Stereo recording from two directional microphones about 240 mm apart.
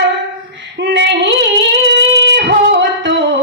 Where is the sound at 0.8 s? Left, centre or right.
Right.